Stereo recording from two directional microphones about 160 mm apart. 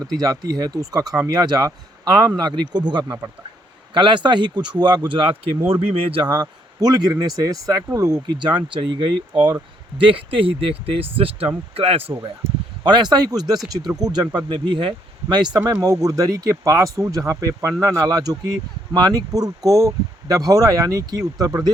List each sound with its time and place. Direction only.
0.1 s speech: 25° right (ahead or behind)